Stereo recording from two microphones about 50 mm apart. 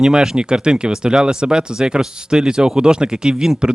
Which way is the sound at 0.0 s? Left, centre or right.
Centre.